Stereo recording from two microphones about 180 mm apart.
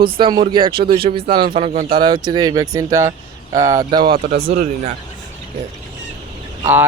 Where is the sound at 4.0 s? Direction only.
55° right (ahead or behind).